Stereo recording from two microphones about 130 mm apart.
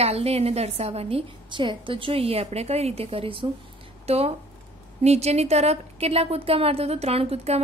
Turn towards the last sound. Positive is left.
turn(degrees=-50)  # may be behind; listen again after turning